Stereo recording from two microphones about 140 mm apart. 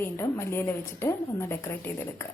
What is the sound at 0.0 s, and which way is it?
A woman's voice, 20° left (ahead or behind).